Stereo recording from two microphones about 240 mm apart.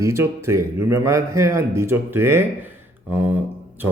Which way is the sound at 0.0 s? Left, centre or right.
Centre.